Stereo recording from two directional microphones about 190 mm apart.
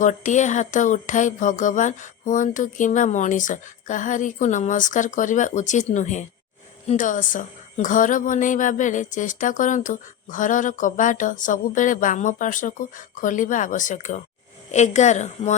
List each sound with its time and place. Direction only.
0.0 s speech: 40° left (ahead or behind)